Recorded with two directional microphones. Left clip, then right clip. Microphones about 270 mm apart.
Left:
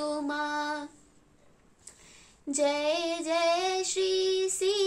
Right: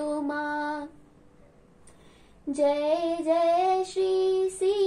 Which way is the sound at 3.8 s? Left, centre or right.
Centre.